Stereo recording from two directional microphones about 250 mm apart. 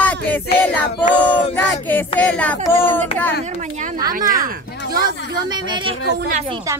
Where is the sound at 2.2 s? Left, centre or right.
Centre.